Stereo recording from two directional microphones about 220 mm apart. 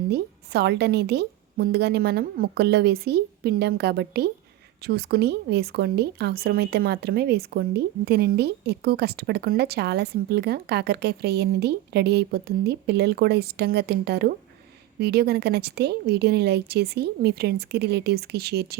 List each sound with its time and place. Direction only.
0.1 s speech: 50° right (ahead or behind)